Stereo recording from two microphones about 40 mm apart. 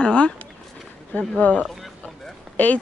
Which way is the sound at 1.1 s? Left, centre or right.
Left.